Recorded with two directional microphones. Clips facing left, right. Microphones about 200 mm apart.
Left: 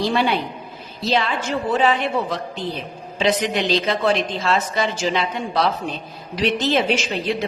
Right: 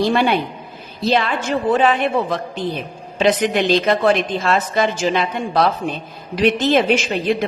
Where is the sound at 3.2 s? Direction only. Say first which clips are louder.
Right 4 dB; 55° right (ahead or behind).